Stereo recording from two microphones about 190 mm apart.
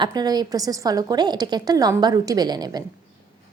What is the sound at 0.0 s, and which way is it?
A woman's voice, 20° right (ahead or behind).